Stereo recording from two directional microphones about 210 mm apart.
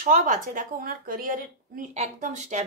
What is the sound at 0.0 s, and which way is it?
Speech, 40° right (ahead or behind).